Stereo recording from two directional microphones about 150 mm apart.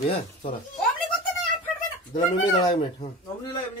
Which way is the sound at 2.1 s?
30° left (ahead or behind).